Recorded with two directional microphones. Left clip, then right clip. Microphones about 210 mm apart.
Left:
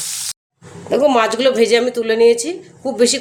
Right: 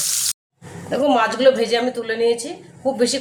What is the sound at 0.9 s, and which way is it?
Speech, 50° left (ahead or behind).